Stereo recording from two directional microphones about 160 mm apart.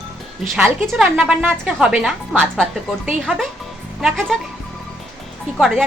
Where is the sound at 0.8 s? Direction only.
Centre (ahead or behind).